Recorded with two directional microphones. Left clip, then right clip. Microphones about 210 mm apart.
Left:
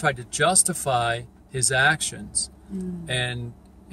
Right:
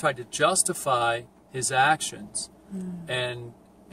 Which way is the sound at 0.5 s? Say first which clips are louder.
Left 3 dB; 20° left (ahead or behind).